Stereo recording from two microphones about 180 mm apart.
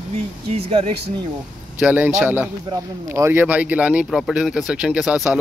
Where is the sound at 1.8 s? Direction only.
5° right (ahead or behind).